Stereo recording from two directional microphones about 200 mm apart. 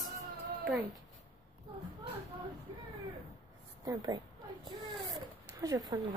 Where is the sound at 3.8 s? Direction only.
20° right (ahead or behind).